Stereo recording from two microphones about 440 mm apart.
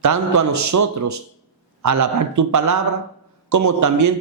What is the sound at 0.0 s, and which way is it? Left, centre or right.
Speech, right.